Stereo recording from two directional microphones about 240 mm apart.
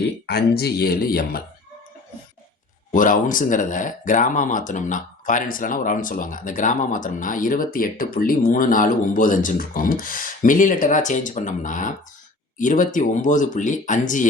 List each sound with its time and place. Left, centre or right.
0.3 s speech: left
2.9 s speech: left